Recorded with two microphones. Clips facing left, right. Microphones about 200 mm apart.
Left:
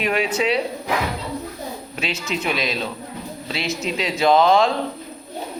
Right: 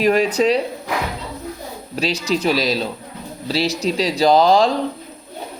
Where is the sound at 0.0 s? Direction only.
40° right (ahead or behind).